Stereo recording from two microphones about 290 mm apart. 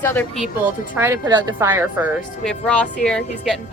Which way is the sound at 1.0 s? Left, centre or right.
Centre.